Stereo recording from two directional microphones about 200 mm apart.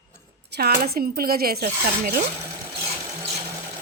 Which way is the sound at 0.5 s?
50° right (ahead or behind).